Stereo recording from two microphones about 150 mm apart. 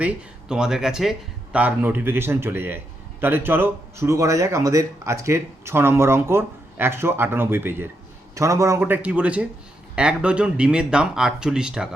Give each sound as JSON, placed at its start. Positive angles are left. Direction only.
{"t": 0.0, "sound": "a man's voice", "side_deg": -5}